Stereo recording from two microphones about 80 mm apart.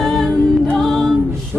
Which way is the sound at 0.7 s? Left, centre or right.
Centre.